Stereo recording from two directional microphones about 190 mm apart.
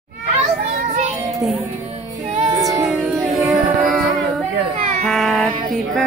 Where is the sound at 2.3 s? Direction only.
35° right (ahead or behind).